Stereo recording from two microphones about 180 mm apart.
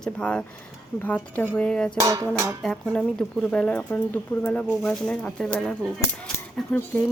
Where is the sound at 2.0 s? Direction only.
20° right (ahead or behind).